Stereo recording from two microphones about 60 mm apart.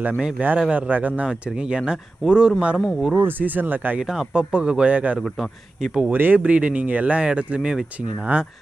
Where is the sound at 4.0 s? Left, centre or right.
Centre.